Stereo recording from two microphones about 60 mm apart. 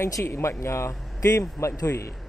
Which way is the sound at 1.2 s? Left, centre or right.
Left.